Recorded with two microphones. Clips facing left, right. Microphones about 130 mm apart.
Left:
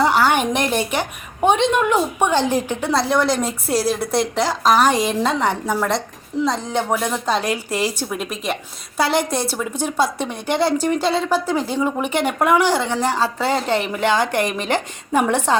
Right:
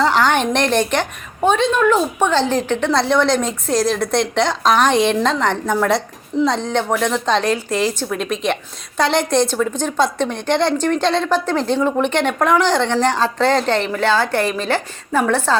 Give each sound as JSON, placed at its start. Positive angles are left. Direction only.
{"t": 0.0, "sound": "a woman's voice", "side_deg": 10}